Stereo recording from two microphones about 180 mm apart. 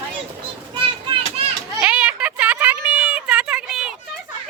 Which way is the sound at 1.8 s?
5° right (ahead or behind).